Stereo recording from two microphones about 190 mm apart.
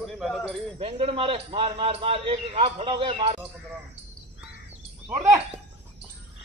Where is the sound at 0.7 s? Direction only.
30° right (ahead or behind).